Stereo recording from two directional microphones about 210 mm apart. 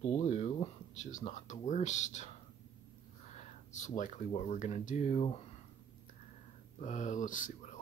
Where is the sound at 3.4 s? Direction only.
35° left (ahead or behind).